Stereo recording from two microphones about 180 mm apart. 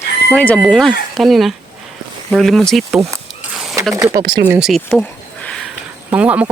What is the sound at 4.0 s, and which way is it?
Speech, 15° right (ahead or behind).